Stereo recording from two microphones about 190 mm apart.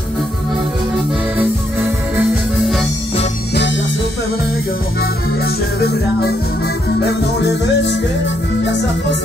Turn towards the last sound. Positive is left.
turn(degrees=65)  # may be behind; listen again after turning